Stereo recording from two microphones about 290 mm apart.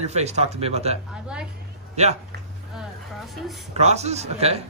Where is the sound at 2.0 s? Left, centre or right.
Right.